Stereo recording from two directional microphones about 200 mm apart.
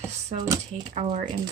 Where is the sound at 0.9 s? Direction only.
30° right (ahead or behind).